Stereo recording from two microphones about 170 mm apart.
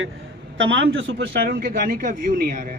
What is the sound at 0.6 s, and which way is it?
A man's voice, 90° right.